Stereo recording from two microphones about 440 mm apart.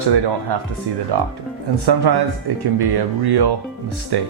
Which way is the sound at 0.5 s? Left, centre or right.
Right.